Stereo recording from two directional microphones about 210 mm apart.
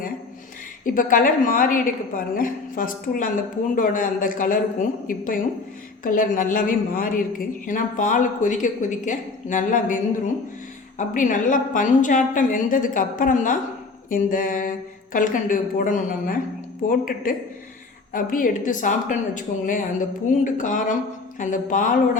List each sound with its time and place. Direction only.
0.9 s speech: 40° left (ahead or behind)